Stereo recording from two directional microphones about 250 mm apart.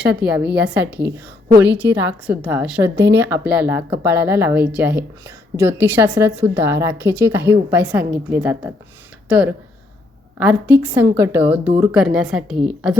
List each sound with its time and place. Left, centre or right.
0.3 s a woman's voice: centre
1.6 s a woman's voice: right
2.2 s a woman's voice: centre